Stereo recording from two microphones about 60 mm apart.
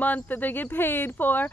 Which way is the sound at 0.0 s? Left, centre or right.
Left.